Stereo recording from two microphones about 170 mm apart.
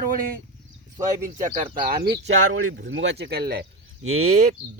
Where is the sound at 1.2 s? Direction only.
50° right (ahead or behind); by 2.3 s 65° right (ahead or behind).